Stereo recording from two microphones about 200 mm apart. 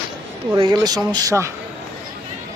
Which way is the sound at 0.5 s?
20° right (ahead or behind).